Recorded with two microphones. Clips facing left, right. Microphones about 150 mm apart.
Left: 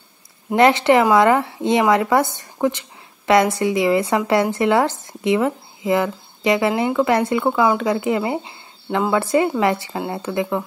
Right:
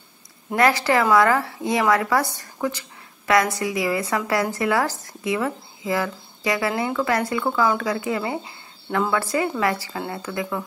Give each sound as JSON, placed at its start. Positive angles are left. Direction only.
{"t": 0.6, "sound": "speech", "side_deg": 25}